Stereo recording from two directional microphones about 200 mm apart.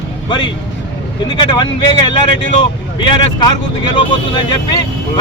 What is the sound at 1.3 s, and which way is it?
Speech, 25° left (ahead or behind).